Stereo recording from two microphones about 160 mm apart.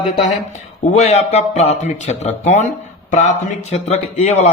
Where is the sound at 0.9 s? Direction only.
40° left (ahead or behind).